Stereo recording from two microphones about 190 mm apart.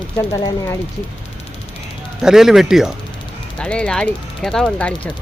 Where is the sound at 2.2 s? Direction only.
5° right (ahead or behind).